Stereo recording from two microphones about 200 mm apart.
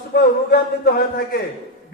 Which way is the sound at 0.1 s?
50° left (ahead or behind).